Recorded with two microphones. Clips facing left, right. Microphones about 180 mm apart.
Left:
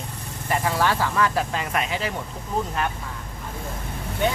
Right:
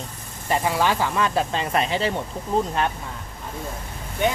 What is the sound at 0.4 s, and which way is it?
Speech, 20° right (ahead or behind).